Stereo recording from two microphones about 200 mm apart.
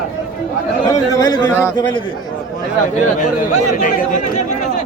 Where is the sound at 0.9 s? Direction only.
15° left (ahead or behind).